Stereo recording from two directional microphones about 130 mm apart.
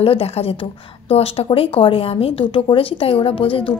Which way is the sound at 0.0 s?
45° left (ahead or behind).